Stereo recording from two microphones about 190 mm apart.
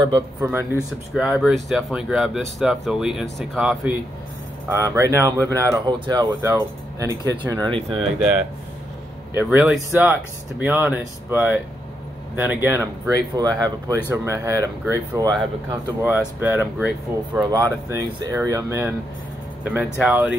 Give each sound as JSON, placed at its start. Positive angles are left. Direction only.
{"t": 0.4, "sound": "speech", "side_deg": -10}
{"t": 1.1, "sound": "speech", "side_deg": 0}
{"t": 9.3, "sound": "speech", "side_deg": -10}
{"t": 17.4, "sound": "speech", "side_deg": -20}